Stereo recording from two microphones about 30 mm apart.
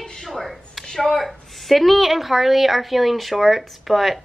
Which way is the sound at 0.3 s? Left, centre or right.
Centre.